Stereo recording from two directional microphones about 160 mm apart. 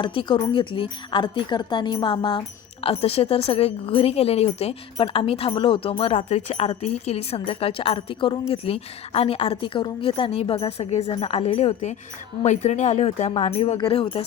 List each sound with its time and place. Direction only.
0.0 s a woman's voice: 30° left (ahead or behind)